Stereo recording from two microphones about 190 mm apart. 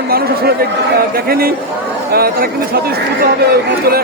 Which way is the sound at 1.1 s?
50° right (ahead or behind).